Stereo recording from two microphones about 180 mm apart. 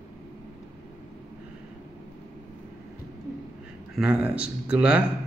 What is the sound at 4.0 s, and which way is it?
Speech, 5° right (ahead or behind).